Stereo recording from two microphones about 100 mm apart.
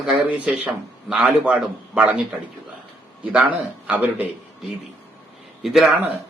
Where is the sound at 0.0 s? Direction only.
5° right (ahead or behind).